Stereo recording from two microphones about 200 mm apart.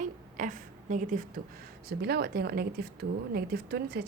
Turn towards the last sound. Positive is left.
turn(degrees=-50)  # may be behind; listen again after turning